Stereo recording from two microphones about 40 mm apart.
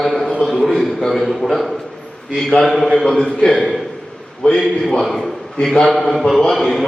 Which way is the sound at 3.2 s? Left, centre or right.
Left.